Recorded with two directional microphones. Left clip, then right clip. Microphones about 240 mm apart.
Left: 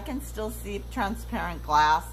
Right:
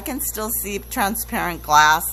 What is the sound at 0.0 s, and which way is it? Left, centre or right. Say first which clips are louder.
A woman's voice: right 6 dB; right.